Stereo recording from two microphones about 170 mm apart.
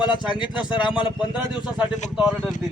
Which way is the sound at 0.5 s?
5° right (ahead or behind).